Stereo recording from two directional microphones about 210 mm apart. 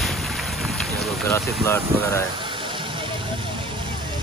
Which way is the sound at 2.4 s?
25° right (ahead or behind).